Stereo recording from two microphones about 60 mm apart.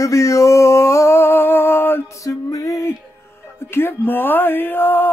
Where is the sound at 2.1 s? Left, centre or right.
Left.